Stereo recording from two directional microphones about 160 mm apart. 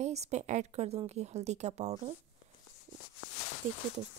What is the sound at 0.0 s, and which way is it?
Speech, 45° right (ahead or behind).